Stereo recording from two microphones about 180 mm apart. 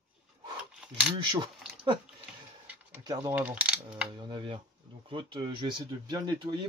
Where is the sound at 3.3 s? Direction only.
10° right (ahead or behind).